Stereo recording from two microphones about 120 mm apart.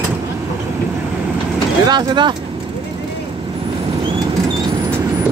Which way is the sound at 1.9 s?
40° right (ahead or behind).